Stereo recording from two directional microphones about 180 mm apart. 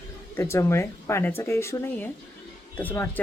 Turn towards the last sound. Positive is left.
turn(degrees=10)  # may be behind; listen again after turning